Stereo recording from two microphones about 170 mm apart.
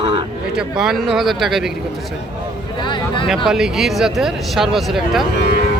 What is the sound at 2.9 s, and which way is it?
Speech, 30° left (ahead or behind).